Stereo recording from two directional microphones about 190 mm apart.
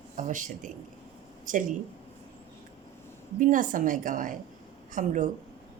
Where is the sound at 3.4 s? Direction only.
45° right (ahead or behind).